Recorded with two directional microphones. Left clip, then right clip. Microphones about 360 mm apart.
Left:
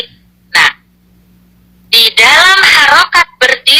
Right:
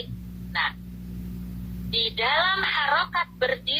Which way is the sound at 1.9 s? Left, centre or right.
Left.